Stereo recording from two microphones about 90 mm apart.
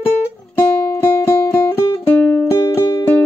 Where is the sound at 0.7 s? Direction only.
30° left (ahead or behind).